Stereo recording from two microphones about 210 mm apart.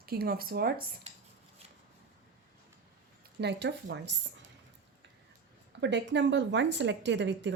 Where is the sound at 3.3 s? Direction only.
55° right (ahead or behind).